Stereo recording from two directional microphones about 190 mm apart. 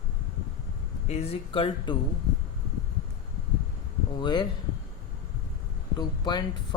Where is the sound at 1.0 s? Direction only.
35° left (ahead or behind).